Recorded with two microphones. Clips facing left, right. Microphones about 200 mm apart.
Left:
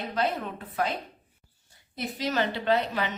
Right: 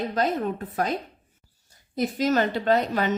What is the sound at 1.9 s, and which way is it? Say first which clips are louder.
A woman's voice: right 6 dB; 45° right (ahead or behind).